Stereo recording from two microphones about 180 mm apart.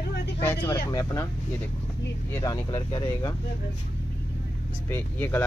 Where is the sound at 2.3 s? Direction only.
20° left (ahead or behind).